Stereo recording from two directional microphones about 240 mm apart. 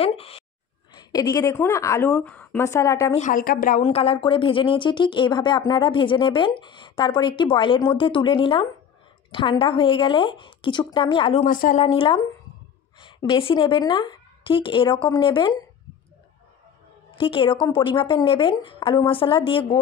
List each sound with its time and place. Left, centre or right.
0.0 s a woman's voice: left
3.2 s a woman's voice: left
11.8 s a woman's voice: left
17.1 s a woman's voice: left